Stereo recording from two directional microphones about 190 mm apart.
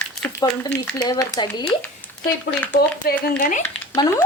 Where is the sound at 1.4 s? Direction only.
20° left (ahead or behind).